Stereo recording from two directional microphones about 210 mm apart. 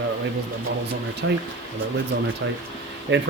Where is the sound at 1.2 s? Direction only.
65° right (ahead or behind).